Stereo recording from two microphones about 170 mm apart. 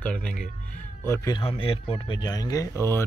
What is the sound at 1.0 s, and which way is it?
A man's voice, 15° left (ahead or behind).